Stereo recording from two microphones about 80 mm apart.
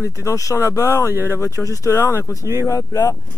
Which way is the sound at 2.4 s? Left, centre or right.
Right.